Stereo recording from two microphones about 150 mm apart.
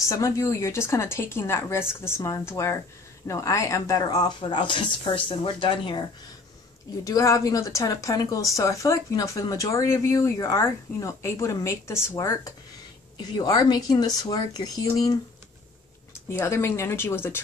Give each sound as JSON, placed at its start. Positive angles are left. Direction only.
{"t": 0.1, "sound": "speech", "side_deg": 20}
{"t": 7.1, "sound": "speech", "side_deg": 20}
{"t": 16.3, "sound": "speech", "side_deg": 15}